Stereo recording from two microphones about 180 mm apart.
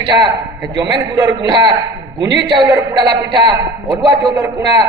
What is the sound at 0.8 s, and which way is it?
A man's voice, 20° right (ahead or behind).